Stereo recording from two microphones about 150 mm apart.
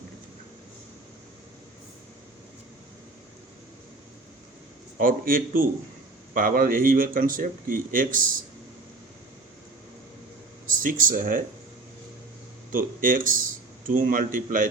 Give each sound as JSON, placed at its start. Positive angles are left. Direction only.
{"t": 4.9, "sound": "speech", "side_deg": -70}
{"t": 10.7, "sound": "speech", "side_deg": -65}
{"t": 12.7, "sound": "speech", "side_deg": -65}